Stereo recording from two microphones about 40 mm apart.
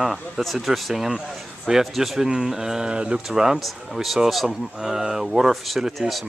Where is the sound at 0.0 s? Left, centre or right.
Centre; by 3.2 s right.